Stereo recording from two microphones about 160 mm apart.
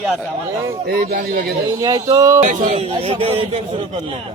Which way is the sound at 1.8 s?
25° right (ahead or behind).